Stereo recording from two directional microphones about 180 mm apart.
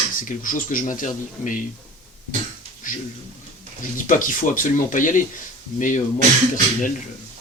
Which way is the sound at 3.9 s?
45° left (ahead or behind).